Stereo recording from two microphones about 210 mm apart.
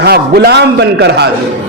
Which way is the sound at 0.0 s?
50° right (ahead or behind).